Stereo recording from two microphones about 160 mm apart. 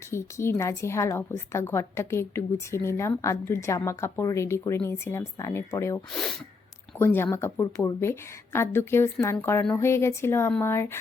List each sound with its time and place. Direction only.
0.1 s a woman's voice: 15° left (ahead or behind)
7.0 s a woman's voice: 15° left (ahead or behind)